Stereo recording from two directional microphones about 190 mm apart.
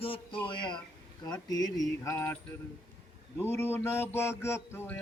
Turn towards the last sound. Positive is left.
turn(degrees=15)  # may be behind; listen again after turning